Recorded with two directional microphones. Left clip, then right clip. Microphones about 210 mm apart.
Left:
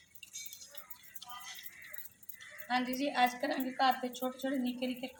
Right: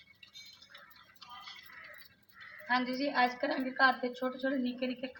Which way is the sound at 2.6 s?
Centre (ahead or behind).